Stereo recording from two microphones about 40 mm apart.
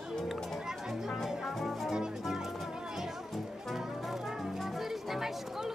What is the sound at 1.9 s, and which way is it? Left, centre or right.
Music, centre.